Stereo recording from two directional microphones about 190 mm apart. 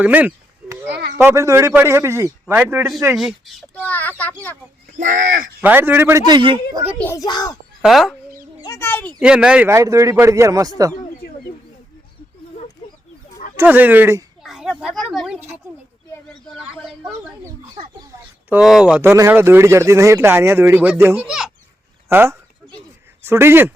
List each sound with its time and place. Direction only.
0.0 s a sound: 10° right (ahead or behind)
0.9 s a sound: 60° right (ahead or behind)
1.2 s speech: 15° right (ahead or behind); by 4.5 s 10° left (ahead or behind)
4.9 s speech: 40° right (ahead or behind)
5.5 s speech: 10° right (ahead or behind)
7.0 s a child's voice: 15° left (ahead or behind)
7.8 s speech: centre (ahead or behind)
8.6 s a child's voice: 15° left (ahead or behind)
9.2 s speech: 5° right (ahead or behind)
13.6 s a child's voice: 10° right (ahead or behind)
17.0 s speech: 10° right (ahead or behind)